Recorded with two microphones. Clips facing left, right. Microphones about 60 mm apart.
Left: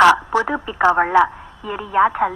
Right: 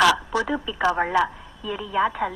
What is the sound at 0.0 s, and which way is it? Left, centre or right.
A woman's voice, left.